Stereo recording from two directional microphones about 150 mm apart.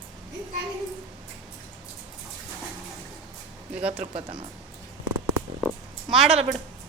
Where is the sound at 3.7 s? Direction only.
10° right (ahead or behind).